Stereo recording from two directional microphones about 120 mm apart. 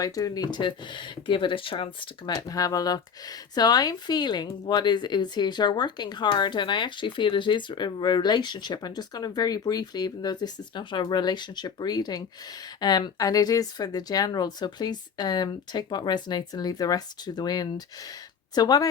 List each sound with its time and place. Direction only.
0.0 s speech: 30° left (ahead or behind)